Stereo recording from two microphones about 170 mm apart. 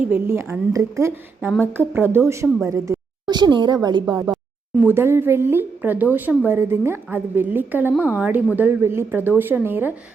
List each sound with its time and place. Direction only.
0.0 s a woman's voice: 10° right (ahead or behind)
4.9 s a woman's voice: 15° right (ahead or behind)